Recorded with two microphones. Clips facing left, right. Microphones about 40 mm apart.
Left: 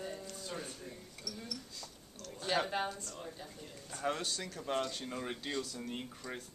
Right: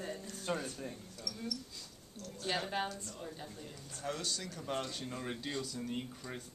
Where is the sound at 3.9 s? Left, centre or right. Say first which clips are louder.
Left 5 dB; left.